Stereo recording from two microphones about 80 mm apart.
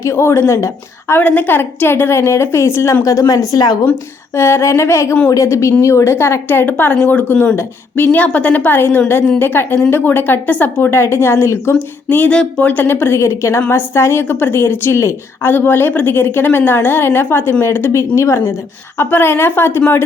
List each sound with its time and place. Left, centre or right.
0.0 s a woman's voice: left
1.2 s a woman's voice: left
4.4 s a woman's voice: left
12.0 s a woman's voice: centre